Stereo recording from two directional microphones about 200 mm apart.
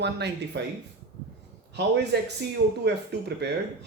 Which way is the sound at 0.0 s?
60° right (ahead or behind).